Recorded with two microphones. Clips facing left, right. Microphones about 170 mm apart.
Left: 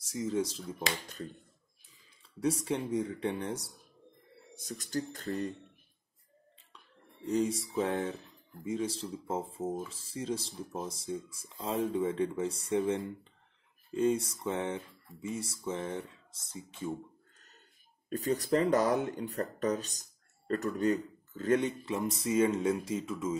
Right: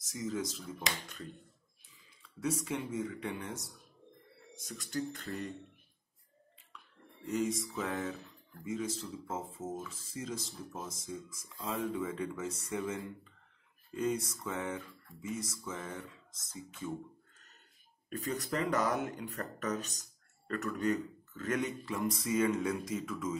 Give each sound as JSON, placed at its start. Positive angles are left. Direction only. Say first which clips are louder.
{"t": 0.0, "sound": "speech", "louder": "left 5 dB", "side_deg": 30}
{"t": 7.2, "sound": "speech", "louder": "left 3 dB", "side_deg": 35}
{"t": 18.1, "sound": "speech", "louder": "left 7 dB", "side_deg": 35}